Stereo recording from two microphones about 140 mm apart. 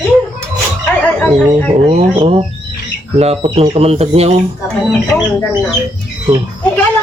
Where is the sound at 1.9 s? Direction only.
45° right (ahead or behind).